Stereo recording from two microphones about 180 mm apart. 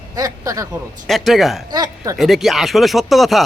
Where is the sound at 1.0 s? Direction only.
Centre (ahead or behind).